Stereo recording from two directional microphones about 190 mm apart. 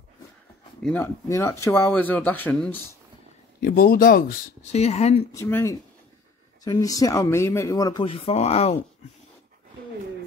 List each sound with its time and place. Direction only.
0.8 s speech: 10° left (ahead or behind)
3.6 s speech: 50° left (ahead or behind)
4.7 s speech: 35° left (ahead or behind)
5.3 s speech: 15° left (ahead or behind); by 8.7 s 35° left (ahead or behind)